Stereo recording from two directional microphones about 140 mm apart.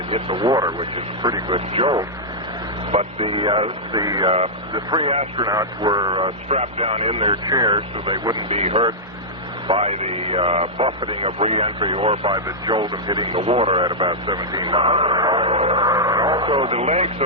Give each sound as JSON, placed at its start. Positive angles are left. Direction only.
{"t": 0.1, "sound": "speech", "side_deg": -40}
{"t": 2.9, "sound": "speech", "side_deg": -45}
{"t": 6.2, "sound": "speech", "side_deg": -45}